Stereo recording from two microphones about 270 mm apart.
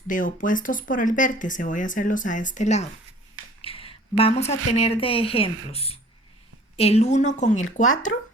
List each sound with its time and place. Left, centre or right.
0.1 s speech: left
3.6 s a sound: left
4.2 s speech: left